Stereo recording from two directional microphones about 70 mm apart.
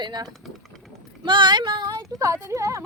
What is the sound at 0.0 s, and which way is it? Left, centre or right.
Speech, right.